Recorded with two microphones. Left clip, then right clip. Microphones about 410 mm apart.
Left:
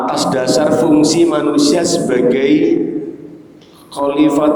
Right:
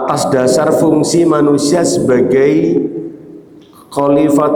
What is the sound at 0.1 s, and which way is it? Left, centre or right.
A man's voice, right.